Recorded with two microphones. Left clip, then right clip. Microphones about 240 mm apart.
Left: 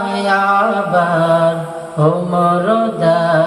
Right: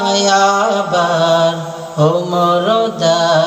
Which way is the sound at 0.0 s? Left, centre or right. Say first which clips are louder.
Right 3 dB; right.